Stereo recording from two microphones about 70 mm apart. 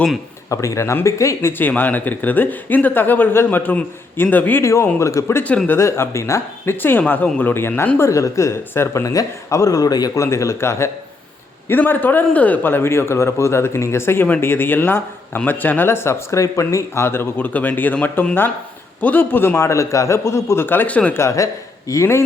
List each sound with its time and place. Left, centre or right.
0.5 s speech: left
4.6 s speech: left
6.7 s a man's voice: left
7.9 s speech: left
8.7 s speech: left
10.2 s a man's voice: left
11.7 s a man's voice: left
20.7 s speech: left
21.1 s speech: left